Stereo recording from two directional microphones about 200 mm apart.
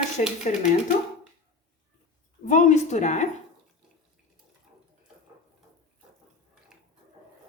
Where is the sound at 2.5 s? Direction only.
35° left (ahead or behind).